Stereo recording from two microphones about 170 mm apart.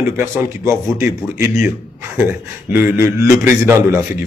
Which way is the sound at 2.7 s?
15° right (ahead or behind).